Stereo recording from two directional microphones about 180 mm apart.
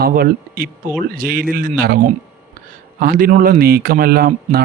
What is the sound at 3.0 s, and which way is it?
Speech, 50° right (ahead or behind).